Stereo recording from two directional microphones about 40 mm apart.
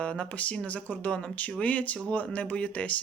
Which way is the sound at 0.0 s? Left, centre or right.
Left.